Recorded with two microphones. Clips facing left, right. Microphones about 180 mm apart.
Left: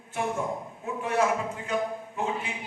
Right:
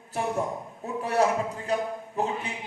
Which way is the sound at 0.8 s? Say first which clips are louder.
Right 2 dB; 35° right (ahead or behind).